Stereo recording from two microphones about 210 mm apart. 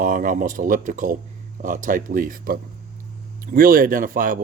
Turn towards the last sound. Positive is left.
turn(degrees=-40)  # may be behind; listen again after turning